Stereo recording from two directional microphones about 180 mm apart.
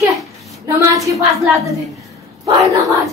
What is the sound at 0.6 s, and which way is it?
Speech, 20° right (ahead or behind).